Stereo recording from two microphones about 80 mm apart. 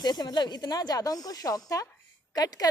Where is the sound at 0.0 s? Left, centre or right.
Left.